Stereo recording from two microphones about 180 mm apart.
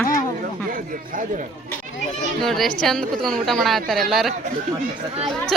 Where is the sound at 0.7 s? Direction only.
50° right (ahead or behind).